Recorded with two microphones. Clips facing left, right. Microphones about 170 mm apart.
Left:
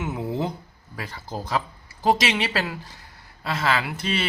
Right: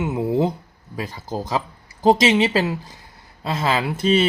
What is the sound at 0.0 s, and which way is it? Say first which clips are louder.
A man's voice: right 7 dB; 20° right (ahead or behind).